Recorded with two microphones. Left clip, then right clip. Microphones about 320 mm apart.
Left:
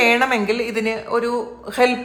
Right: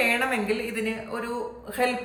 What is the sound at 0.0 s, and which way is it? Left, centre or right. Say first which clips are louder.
A woman's voice: left 8 dB; centre.